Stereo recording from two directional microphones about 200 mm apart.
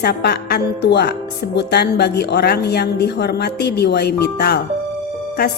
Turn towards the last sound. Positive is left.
turn(degrees=55)  # may be behind; listen again after turning